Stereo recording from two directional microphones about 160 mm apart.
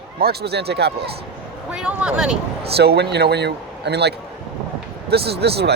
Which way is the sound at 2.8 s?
90° right.